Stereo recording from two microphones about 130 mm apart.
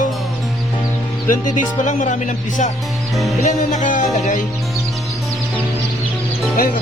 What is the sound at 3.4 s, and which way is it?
Music, 70° left (ahead or behind).